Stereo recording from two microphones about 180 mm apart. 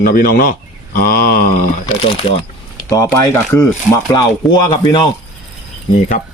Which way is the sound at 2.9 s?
15° left (ahead or behind).